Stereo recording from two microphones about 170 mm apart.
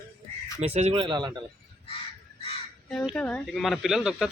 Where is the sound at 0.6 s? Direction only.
40° right (ahead or behind).